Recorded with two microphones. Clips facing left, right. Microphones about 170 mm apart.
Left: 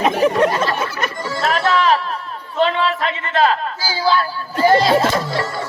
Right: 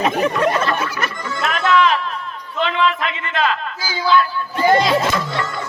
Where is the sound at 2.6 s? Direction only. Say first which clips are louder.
Left 2 dB; 35° left (ahead or behind).